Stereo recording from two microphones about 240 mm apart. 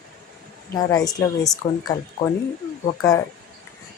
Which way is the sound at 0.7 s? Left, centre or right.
Centre.